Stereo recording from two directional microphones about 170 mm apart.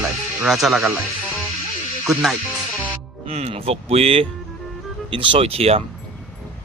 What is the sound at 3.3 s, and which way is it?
Speech, 35° right (ahead or behind).